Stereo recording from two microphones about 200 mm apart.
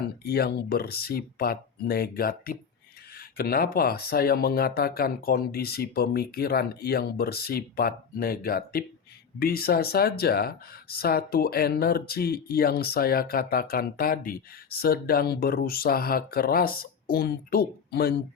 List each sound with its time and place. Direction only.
0.3 s speech: 50° left (ahead or behind)